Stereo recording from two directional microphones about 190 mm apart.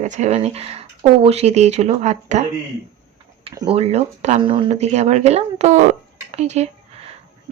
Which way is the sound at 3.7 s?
35° right (ahead or behind).